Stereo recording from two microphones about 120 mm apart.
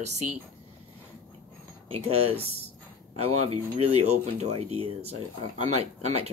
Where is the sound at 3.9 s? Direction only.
65° right (ahead or behind).